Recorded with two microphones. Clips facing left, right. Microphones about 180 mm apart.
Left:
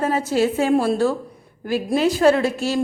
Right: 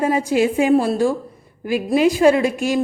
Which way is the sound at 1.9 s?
10° right (ahead or behind).